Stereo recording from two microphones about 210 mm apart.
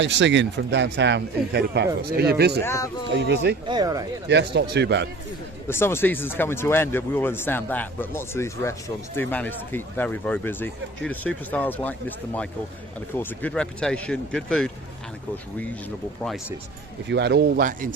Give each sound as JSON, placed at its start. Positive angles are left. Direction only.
{"t": 0.0, "sound": "speech", "side_deg": -60}
{"t": 2.6, "sound": "speech", "side_deg": 15}
{"t": 3.2, "sound": "speech", "side_deg": -55}
{"t": 3.7, "sound": "speech", "side_deg": -20}
{"t": 4.3, "sound": "speech", "side_deg": -55}
{"t": 5.6, "sound": "speech", "side_deg": 10}
{"t": 16.2, "sound": "speech", "side_deg": 0}
{"t": 17.1, "sound": "speech", "side_deg": -55}